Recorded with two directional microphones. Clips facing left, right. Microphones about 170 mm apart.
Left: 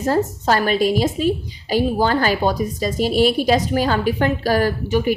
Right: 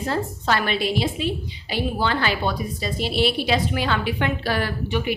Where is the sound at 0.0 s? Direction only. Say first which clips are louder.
Left 6 dB; 45° left (ahead or behind).